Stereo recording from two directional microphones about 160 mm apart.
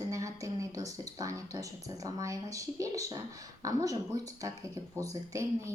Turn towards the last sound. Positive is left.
turn(degrees=-20)  # may be behind; listen again after turning